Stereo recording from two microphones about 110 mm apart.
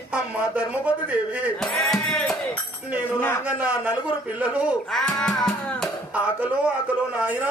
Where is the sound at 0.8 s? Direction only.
15° right (ahead or behind).